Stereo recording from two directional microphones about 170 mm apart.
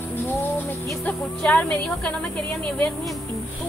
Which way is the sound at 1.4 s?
5° left (ahead or behind).